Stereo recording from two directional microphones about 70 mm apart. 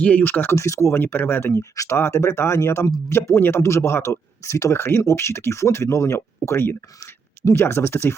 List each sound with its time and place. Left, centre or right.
0.0 s speech: left
0.5 s speech: left
1.7 s speech: left
2.0 s speech: left